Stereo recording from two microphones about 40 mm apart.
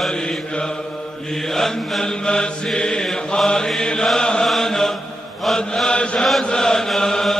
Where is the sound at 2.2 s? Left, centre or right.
Centre.